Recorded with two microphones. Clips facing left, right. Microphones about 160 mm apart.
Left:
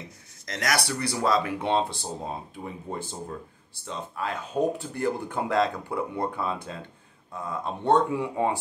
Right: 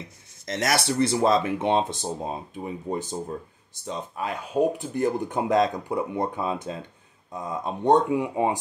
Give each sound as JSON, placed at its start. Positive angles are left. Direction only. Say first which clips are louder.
{"t": 0.5, "sound": "speech", "louder": "right 3 dB", "side_deg": -25}